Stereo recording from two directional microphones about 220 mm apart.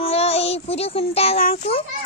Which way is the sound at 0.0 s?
25° left (ahead or behind).